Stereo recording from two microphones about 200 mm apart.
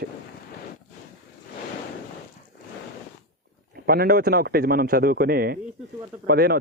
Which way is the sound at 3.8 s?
50° right (ahead or behind).